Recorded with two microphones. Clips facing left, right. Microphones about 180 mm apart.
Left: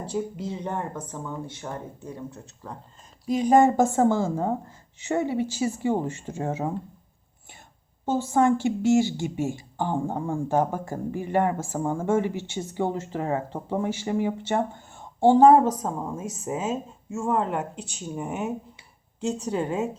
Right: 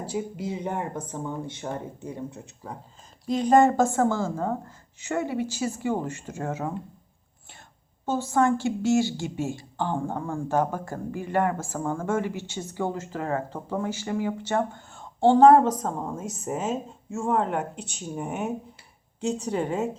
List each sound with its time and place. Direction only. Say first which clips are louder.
0.0 s speech: left 1 dB; 5° right (ahead or behind)
3.2 s speech: left 1 dB; 5° left (ahead or behind)
3.9 s speech: left 3 dB; 25° left (ahead or behind)
8.3 s speech: left 1 dB; 15° left (ahead or behind)
15.2 s a woman's voice: even; 5° left (ahead or behind)